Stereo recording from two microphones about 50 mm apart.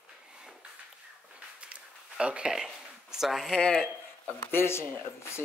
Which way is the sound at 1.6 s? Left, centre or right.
Right.